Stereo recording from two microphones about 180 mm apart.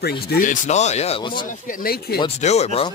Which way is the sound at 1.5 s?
50° left (ahead or behind).